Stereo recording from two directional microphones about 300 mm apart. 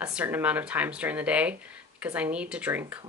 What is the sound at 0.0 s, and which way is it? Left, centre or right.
Speech, centre.